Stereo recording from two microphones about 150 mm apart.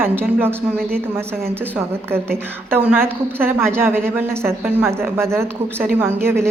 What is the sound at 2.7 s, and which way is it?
A woman's voice, 15° right (ahead or behind).